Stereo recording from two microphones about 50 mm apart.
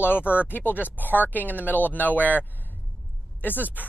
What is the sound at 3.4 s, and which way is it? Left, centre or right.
Speech, left.